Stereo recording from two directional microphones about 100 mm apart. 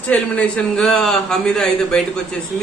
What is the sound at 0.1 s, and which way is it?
A man's voice, 10° left (ahead or behind).